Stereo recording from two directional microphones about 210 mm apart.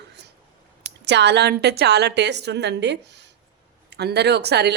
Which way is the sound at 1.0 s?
55° right (ahead or behind).